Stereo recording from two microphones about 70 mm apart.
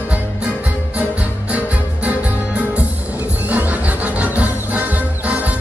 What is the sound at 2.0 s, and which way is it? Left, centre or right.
Music, right.